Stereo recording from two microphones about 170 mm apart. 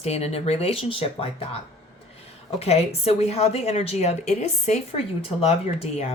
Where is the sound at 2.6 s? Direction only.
35° left (ahead or behind).